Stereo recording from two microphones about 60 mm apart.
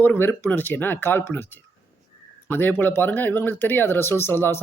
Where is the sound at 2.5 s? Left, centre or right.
Left.